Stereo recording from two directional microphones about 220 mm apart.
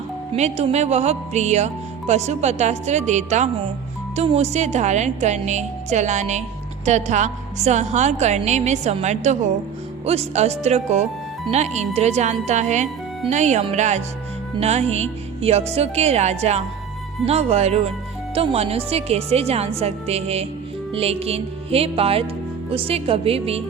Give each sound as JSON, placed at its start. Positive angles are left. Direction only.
{"t": 0.3, "sound": "a woman's voice", "side_deg": -30}